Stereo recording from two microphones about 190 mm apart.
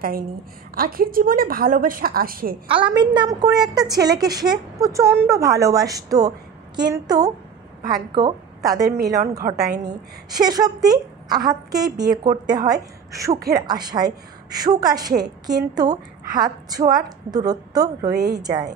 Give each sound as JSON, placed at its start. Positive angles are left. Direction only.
{"t": 0.7, "sound": "a woman's voice", "side_deg": -50}
{"t": 2.7, "sound": "a woman's voice", "side_deg": -25}